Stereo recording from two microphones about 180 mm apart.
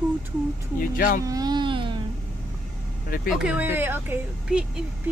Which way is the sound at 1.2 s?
20° right (ahead or behind).